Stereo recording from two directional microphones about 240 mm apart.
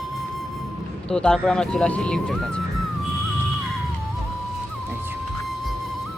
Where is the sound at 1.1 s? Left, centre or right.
Centre.